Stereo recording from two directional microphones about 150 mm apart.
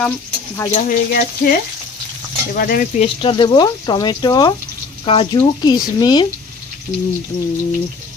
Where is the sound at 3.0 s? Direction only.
35° left (ahead or behind).